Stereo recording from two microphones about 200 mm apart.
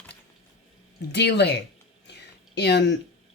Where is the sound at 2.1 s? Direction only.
55° left (ahead or behind).